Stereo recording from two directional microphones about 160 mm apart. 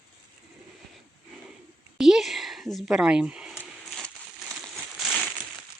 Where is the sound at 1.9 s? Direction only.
5° right (ahead or behind).